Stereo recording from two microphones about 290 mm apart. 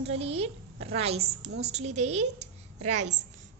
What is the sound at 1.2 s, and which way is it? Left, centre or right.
Speech, right.